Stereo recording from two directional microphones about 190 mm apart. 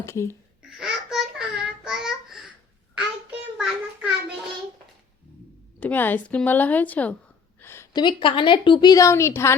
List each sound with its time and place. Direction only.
0.0 s a woman's voice: 15° left (ahead or behind)
0.8 s babbling: centre (ahead or behind)
3.2 s child singing: 5° right (ahead or behind)
5.8 s a woman's voice: 10° left (ahead or behind)
7.6 s a sound: 15° left (ahead or behind)
8.0 s a woman's voice: 25° left (ahead or behind)